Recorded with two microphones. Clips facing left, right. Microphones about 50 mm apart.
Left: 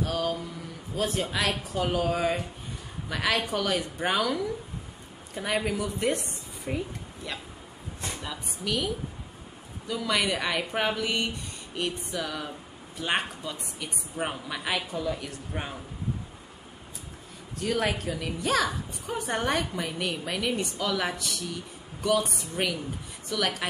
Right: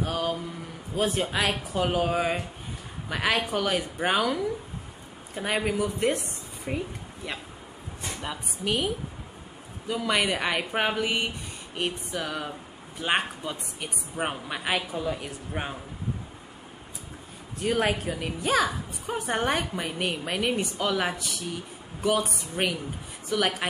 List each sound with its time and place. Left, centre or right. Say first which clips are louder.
0.0 s a sound: even; centre
0.9 s a woman's voice: right 2 dB; right
8.2 s a woman's voice: right 3 dB; right
17.6 s a woman's voice: right 2 dB; right